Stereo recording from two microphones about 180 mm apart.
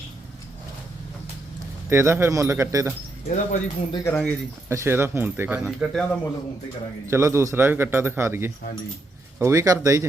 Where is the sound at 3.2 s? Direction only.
40° left (ahead or behind).